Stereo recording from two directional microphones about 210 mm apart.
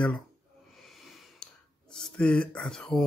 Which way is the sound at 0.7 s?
Centre (ahead or behind).